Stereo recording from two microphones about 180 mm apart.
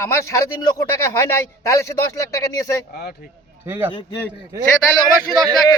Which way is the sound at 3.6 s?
10° right (ahead or behind).